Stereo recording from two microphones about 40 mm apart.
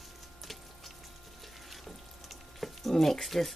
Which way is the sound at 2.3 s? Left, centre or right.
Centre.